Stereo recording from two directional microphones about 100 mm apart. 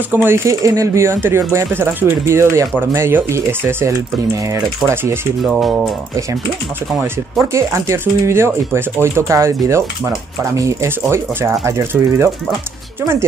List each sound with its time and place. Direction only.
0.1 s speech: 25° right (ahead or behind)
5.4 s speech: centre (ahead or behind)
7.5 s speech: 30° right (ahead or behind)